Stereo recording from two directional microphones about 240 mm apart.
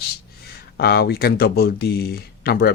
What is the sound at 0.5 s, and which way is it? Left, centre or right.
Speech, left.